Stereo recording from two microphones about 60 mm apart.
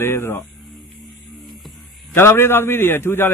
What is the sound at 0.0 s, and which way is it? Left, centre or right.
Speech, left.